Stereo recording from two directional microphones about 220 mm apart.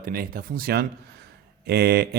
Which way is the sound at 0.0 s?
40° right (ahead or behind).